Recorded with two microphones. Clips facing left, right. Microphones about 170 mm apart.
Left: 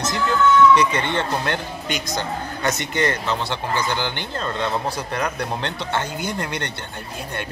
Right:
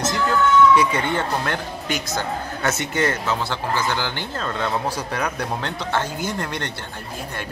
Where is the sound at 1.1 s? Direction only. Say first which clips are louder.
Even; 5° right (ahead or behind).